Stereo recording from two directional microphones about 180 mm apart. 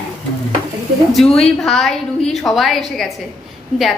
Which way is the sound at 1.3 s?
Centre (ahead or behind).